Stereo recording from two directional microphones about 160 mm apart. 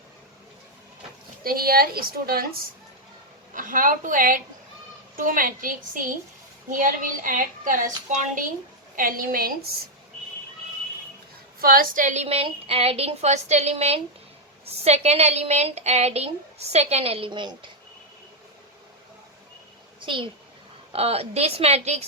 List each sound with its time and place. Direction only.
1.5 s a woman's voice: 70° right (ahead or behind)
3.5 s speech: 55° right (ahead or behind)
9.0 s speech: 60° right (ahead or behind)
11.6 s a woman's voice: 65° right (ahead or behind); by 17.7 s 30° right (ahead or behind)
20.0 s a child's voice: 30° right (ahead or behind)